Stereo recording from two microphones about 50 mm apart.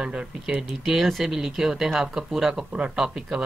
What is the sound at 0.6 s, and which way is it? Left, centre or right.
Speech, centre.